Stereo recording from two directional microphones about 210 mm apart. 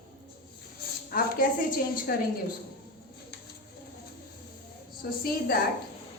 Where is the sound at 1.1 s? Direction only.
40° left (ahead or behind).